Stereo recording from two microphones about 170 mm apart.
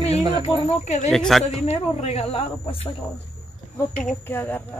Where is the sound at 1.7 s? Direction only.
40° left (ahead or behind).